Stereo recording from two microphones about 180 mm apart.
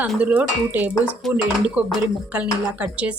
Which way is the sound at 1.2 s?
Centre (ahead or behind).